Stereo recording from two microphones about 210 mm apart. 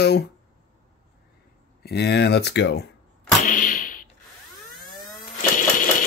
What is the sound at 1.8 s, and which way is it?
Speech, 50° left (ahead or behind).